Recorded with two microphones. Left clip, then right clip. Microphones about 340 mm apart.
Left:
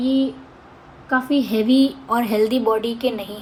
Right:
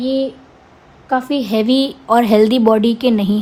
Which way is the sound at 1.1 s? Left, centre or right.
Right.